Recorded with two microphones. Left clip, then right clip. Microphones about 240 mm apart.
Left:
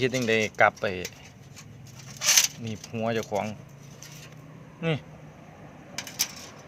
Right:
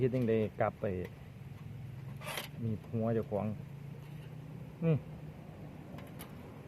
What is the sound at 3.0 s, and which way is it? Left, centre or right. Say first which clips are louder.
Speech: left 7 dB; centre.